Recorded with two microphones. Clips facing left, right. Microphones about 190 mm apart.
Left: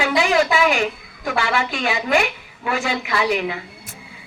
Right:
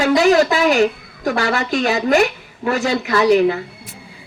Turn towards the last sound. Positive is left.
turn(degrees=-40)  # may be behind; listen again after turning